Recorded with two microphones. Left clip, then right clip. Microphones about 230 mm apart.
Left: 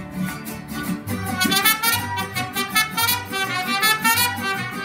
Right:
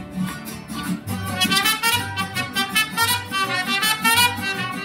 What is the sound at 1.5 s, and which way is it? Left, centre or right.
Music, centre.